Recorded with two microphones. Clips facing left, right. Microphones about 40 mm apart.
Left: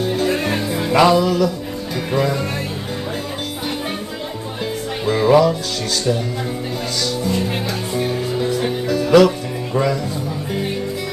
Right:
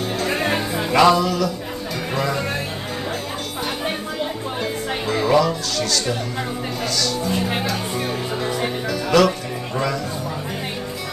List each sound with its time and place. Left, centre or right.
0.3 s music: centre
0.8 s music: centre
5.0 s music: centre
7.2 s speech: centre
7.9 s music: centre